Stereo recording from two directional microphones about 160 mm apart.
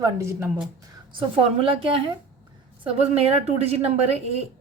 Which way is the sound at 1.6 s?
35° right (ahead or behind).